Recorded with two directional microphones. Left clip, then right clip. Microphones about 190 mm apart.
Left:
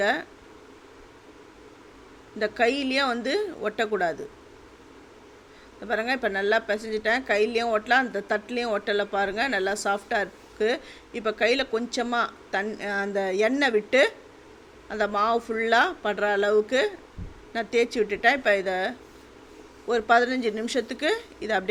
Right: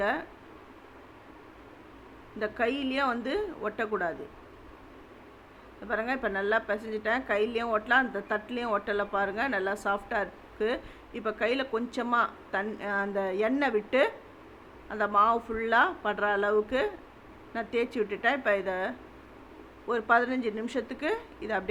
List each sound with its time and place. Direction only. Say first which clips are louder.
0.0 s a woman's voice: left 5 dB; 20° left (ahead or behind)
2.4 s a woman's voice: left 6 dB; 20° left (ahead or behind)
5.8 s a woman's voice: left 4 dB; 20° left (ahead or behind)